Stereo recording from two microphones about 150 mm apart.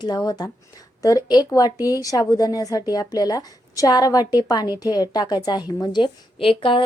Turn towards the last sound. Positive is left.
turn(degrees=35)  # may be behind; listen again after turning